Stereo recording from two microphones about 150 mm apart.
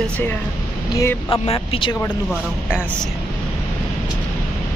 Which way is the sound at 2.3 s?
5° right (ahead or behind).